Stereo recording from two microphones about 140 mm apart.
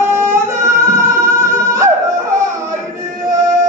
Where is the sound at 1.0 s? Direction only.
20° right (ahead or behind).